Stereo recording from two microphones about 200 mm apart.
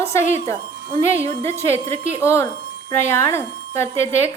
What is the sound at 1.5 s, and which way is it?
A woman's voice, 10° left (ahead or behind).